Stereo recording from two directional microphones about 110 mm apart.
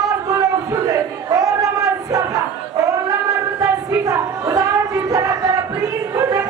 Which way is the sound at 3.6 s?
30° right (ahead or behind).